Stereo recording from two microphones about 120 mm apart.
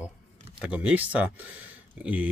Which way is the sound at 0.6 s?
10° right (ahead or behind).